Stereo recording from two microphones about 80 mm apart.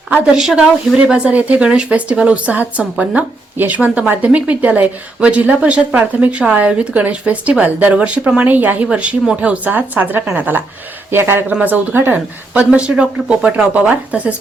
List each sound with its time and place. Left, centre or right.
0.3 s speech: centre